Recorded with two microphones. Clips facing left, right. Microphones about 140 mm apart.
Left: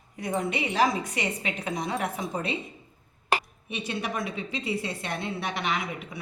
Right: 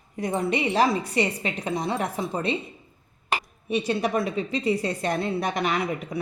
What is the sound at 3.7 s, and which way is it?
A woman's voice, 35° right (ahead or behind).